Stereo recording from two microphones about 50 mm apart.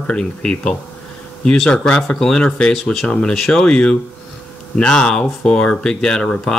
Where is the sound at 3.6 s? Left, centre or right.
Centre.